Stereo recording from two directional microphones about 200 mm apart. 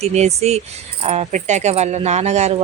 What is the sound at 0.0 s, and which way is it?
Speech, 35° right (ahead or behind).